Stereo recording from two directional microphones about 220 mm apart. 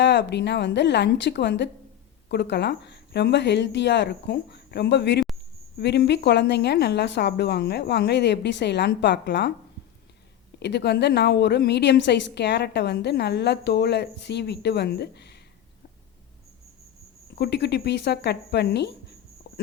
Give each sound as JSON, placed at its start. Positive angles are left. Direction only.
{"t": 0.0, "sound": "a woman's voice", "side_deg": 55}
{"t": 10.6, "sound": "a woman's voice", "side_deg": 50}
{"t": 17.3, "sound": "a woman's voice", "side_deg": 50}
{"t": 19.5, "sound": "a sound", "side_deg": 45}